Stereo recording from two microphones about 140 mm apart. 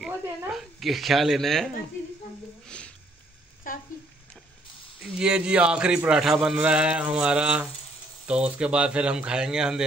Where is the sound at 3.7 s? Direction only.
75° left (ahead or behind).